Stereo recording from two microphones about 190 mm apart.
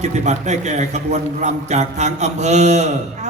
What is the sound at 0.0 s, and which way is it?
A man's voice, 35° right (ahead or behind).